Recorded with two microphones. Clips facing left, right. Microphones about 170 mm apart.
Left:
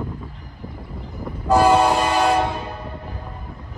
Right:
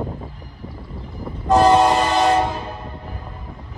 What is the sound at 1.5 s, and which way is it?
Train, 5° left (ahead or behind).